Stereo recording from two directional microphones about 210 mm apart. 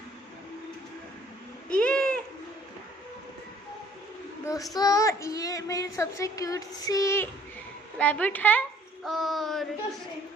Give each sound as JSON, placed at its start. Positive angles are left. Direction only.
{"t": 1.7, "sound": "bird", "side_deg": 5}
{"t": 4.4, "sound": "child singing", "side_deg": 15}
{"t": 9.0, "sound": "a sound", "side_deg": 0}